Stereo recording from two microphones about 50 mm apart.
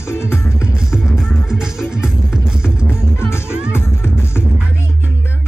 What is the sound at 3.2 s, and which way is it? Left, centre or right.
Music, left.